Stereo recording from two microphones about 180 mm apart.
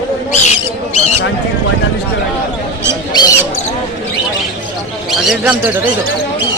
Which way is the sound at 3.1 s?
20° left (ahead or behind).